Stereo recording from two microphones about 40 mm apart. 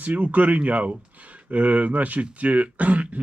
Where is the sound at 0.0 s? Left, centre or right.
Right.